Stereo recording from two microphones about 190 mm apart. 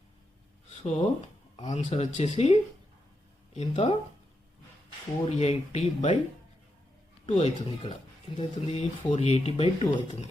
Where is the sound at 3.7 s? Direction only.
30° left (ahead or behind).